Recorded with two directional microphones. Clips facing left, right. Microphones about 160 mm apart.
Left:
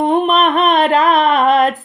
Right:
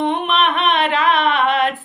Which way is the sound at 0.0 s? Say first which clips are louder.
Left 5 dB; 40° left (ahead or behind).